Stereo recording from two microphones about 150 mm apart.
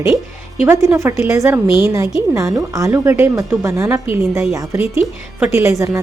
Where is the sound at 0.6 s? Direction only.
15° right (ahead or behind).